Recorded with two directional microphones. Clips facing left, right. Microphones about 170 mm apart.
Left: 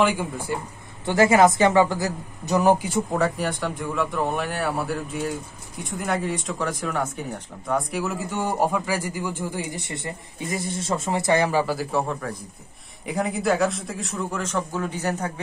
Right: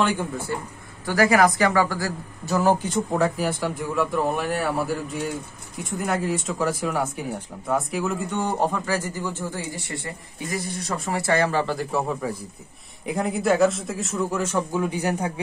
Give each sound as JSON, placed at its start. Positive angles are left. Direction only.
{"t": 0.0, "sound": "speech", "side_deg": 10}
{"t": 1.0, "sound": "a woman's voice", "side_deg": 25}
{"t": 3.1, "sound": "a man's voice", "side_deg": 0}